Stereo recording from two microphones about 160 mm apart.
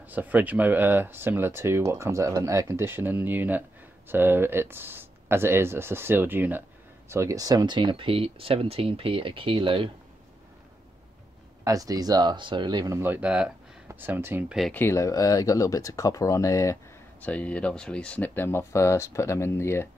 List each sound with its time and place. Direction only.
0.0 s speech: 10° right (ahead or behind); by 9.8 s 35° right (ahead or behind)
11.6 s speech: 20° right (ahead or behind)
14.7 s speech: 15° left (ahead or behind)
17.2 s speech: 10° left (ahead or behind)